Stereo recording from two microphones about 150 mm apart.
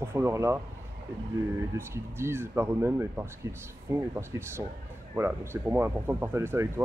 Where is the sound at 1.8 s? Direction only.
15° right (ahead or behind).